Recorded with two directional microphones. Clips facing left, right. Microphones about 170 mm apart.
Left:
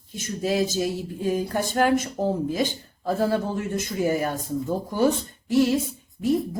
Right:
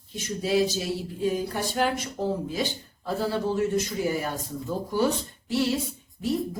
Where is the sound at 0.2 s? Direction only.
50° left (ahead or behind).